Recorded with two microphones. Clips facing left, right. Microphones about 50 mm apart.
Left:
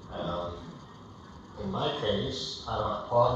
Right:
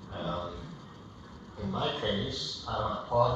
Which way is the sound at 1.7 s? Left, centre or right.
Right.